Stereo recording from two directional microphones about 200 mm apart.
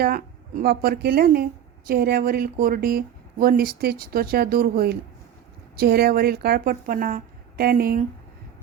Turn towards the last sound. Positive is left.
turn(degrees=-50)  # may be behind; listen again after turning